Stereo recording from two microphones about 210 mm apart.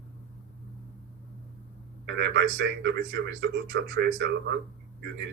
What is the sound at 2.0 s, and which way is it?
A man's voice, 55° right (ahead or behind).